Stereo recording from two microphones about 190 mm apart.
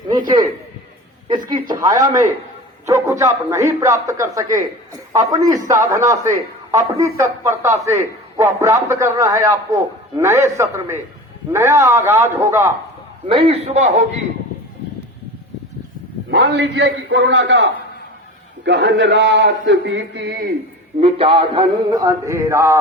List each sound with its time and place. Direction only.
0.1 s speech: 20° right (ahead or behind)
1.6 s a man's voice: 20° right (ahead or behind)
13.2 s a man's voice: 30° right (ahead or behind)
16.3 s a sound: 65° right (ahead or behind)
21.0 s a man's voice: 30° right (ahead or behind)